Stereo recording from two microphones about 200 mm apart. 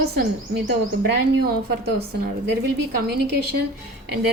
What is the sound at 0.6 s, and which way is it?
A woman's voice, 55° right (ahead or behind).